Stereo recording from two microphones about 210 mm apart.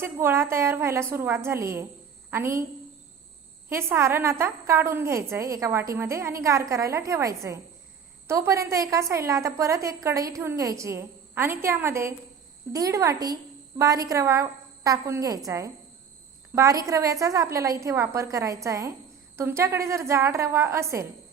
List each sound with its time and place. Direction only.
0.0 s a woman's voice: 10° right (ahead or behind)
3.7 s a woman's voice: 10° right (ahead or behind)